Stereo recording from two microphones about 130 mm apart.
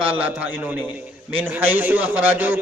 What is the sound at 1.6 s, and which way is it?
Speech, 15° right (ahead or behind).